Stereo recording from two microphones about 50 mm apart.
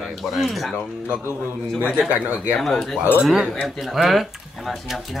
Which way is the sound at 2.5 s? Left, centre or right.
Centre.